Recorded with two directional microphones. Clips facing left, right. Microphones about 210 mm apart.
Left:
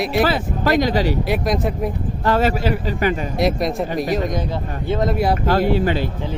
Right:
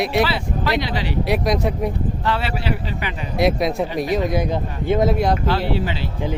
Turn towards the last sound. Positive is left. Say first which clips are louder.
# left 5 dB
turn(degrees=50)  # may be behind; listen again after turning